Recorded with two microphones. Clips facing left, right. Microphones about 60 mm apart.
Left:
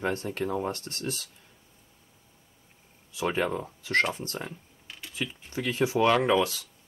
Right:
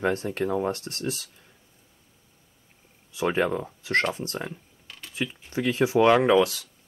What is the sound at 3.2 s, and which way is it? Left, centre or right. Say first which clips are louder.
Speech: right 3 dB; right.